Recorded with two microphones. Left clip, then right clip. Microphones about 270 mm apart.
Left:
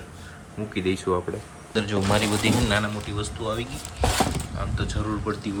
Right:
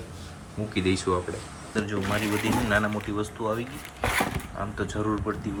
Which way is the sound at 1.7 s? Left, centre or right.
Centre.